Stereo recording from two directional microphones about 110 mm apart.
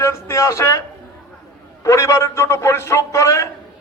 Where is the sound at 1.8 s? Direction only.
30° left (ahead or behind).